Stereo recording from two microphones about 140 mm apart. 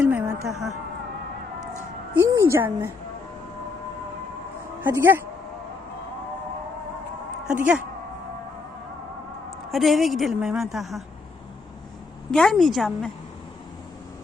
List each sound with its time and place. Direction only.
0.0 s music: 10° right (ahead or behind)
2.2 s a woman's voice: 20° right (ahead or behind)
4.8 s speech: 15° right (ahead or behind)
7.4 s a woman's voice: 10° right (ahead or behind)
9.5 s a woman's voice: centre (ahead or behind)
12.3 s a woman's voice: 5° left (ahead or behind)